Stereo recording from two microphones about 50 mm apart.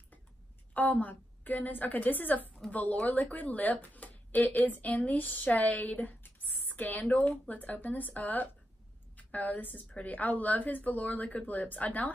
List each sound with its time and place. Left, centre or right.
0.7 s speech: left